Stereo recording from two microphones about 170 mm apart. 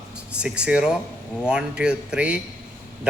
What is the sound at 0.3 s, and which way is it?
A man's voice, 5° right (ahead or behind).